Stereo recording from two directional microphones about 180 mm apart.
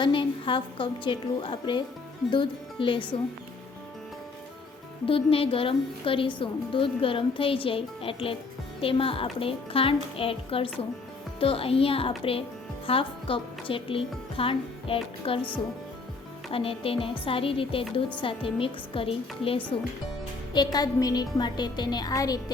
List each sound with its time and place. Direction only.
0.0 s a woman's voice: 30° left (ahead or behind)
5.0 s a woman's voice: 30° left (ahead or behind)
16.5 s a woman's voice: 30° left (ahead or behind)
20.7 s a woman's voice: 20° left (ahead or behind)